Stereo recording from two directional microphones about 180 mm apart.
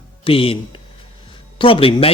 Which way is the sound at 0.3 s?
30° left (ahead or behind).